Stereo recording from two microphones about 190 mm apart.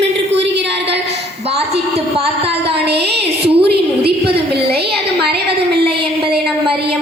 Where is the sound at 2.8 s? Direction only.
60° right (ahead or behind).